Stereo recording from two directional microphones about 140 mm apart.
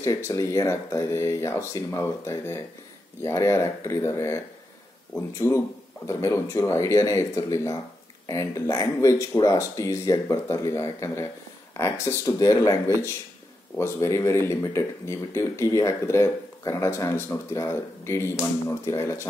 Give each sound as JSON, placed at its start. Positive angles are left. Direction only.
{"t": 0.0, "sound": "speech", "side_deg": 20}
{"t": 5.4, "sound": "speech", "side_deg": 20}